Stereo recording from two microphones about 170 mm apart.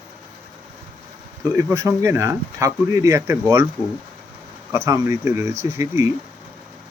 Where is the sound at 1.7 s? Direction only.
15° right (ahead or behind).